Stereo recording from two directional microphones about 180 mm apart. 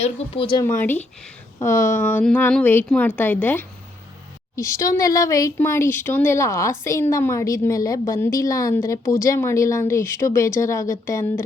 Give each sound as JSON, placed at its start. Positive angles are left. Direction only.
{"t": 0.0, "sound": "speech", "side_deg": 30}
{"t": 0.6, "sound": "speech", "side_deg": 15}